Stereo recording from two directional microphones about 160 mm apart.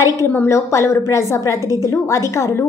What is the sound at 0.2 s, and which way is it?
A woman's voice, 15° left (ahead or behind).